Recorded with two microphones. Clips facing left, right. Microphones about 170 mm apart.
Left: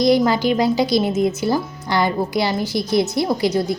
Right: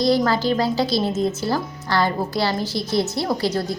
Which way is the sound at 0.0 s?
15° left (ahead or behind).